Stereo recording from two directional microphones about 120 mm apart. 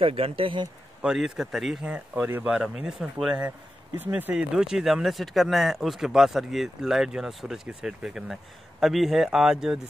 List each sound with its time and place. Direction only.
0.0 s speech: 50° right (ahead or behind)
1.0 s speech: 5° right (ahead or behind)